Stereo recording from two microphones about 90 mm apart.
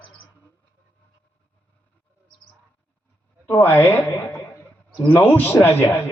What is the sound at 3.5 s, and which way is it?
A man's voice, 20° left (ahead or behind).